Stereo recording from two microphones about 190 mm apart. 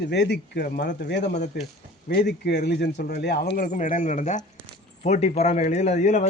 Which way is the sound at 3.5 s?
45° left (ahead or behind).